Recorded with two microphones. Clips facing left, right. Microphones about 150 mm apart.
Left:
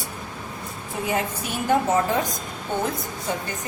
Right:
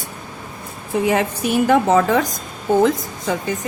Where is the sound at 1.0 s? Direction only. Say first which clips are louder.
Right 7 dB; 85° right.